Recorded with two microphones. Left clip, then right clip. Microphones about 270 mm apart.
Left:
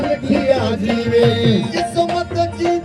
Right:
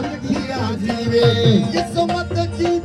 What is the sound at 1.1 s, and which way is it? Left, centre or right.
Music, centre.